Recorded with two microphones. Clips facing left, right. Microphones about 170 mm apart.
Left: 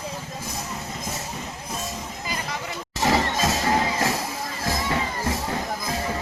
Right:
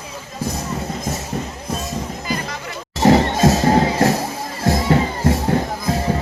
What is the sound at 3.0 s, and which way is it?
Music, 35° right (ahead or behind).